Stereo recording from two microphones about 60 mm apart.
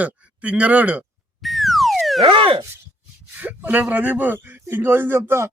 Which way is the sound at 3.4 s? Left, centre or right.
Right.